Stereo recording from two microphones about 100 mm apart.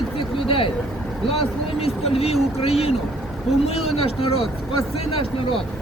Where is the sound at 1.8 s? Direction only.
90° left.